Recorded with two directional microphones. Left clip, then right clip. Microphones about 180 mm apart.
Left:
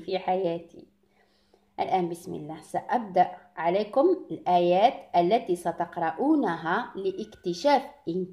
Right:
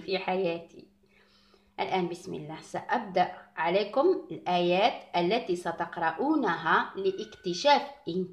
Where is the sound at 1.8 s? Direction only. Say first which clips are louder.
Left 3 dB; 50° left (ahead or behind).